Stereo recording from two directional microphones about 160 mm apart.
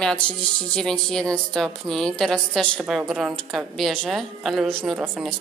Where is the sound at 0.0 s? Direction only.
5° left (ahead or behind).